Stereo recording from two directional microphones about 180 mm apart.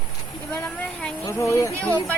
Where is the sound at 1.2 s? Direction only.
15° left (ahead or behind).